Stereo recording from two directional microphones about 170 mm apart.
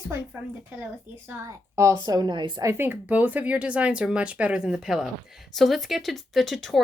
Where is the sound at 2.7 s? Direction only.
10° right (ahead or behind).